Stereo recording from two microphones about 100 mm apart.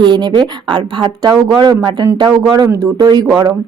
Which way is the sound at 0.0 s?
50° right (ahead or behind).